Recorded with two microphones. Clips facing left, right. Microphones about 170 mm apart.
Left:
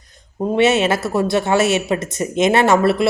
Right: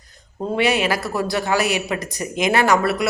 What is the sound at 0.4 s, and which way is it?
Speech, 25° left (ahead or behind).